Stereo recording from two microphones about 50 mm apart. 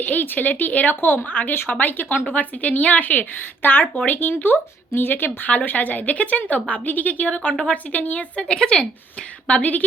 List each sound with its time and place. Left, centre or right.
0.0 s a woman's voice: left
8.4 s speech: centre
9.5 s a woman's voice: left